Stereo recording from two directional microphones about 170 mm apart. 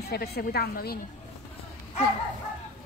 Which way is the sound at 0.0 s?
70° left (ahead or behind).